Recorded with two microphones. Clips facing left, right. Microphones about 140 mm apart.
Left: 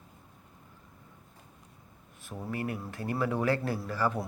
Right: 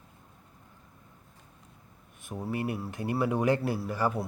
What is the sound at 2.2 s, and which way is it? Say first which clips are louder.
A man's voice: right 3 dB; 15° right (ahead or behind).